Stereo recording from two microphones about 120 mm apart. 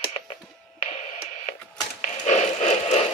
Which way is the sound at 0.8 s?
65° left (ahead or behind).